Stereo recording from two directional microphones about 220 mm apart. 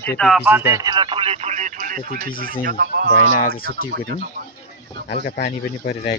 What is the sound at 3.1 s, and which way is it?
Speech, 35° left (ahead or behind).